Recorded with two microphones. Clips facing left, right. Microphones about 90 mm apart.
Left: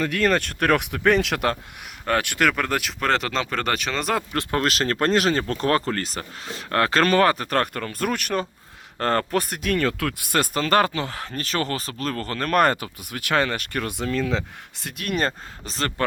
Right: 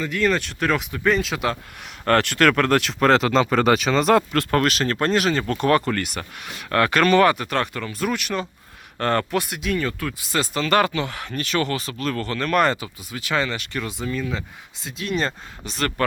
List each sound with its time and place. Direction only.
0.0 s speech: 55° left (ahead or behind)
2.0 s speech: 10° left (ahead or behind)
4.3 s speech: 20° left (ahead or behind)
4.6 s speech: 40° left (ahead or behind)
9.7 s speech: 80° left; by 15.3 s 55° left (ahead or behind)
15.3 s speech: 35° left (ahead or behind)